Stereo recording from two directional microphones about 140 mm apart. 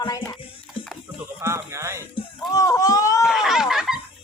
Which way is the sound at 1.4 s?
20° right (ahead or behind).